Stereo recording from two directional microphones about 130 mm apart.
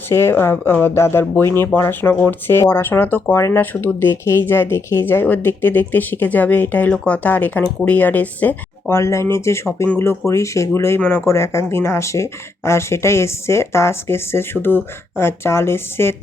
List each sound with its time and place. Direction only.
0.1 s speech: 20° left (ahead or behind)